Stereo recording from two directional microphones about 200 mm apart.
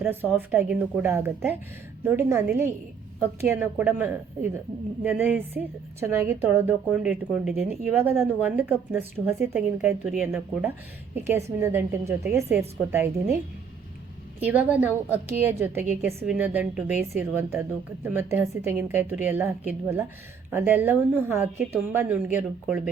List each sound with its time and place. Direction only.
0.0 s a woman's voice: 10° right (ahead or behind)
14.4 s a woman's voice: 10° right (ahead or behind)